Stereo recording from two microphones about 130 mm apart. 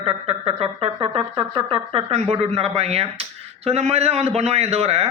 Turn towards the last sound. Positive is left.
turn(degrees=-50)  # may be behind; listen again after turning